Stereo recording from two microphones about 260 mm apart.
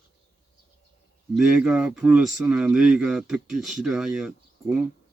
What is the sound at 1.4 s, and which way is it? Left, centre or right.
Speech, centre.